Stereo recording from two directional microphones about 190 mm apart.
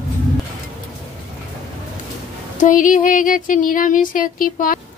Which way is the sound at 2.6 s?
45° left (ahead or behind).